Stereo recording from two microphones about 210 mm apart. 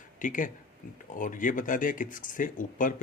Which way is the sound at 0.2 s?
40° left (ahead or behind).